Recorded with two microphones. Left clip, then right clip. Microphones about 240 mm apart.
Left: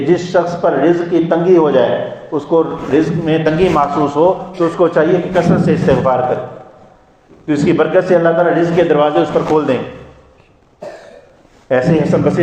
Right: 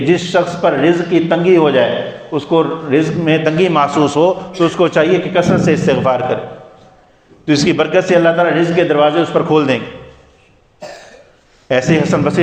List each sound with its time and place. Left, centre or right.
0.0 s a man's voice: right
7.4 s a man's voice: right
11.7 s a man's voice: right